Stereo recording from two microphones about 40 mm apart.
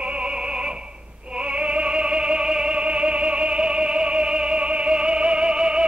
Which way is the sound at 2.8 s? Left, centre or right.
Right.